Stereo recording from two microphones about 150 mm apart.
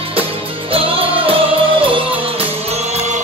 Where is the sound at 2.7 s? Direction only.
50° right (ahead or behind).